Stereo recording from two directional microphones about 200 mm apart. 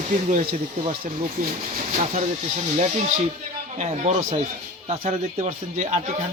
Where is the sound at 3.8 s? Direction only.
35° right (ahead or behind).